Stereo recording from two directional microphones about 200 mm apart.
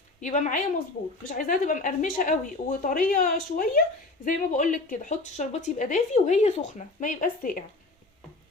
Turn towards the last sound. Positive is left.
turn(degrees=40)  # may be behind; listen again after turning